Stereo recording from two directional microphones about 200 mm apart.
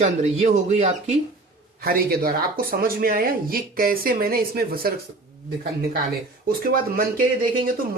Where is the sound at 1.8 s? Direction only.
50° right (ahead or behind).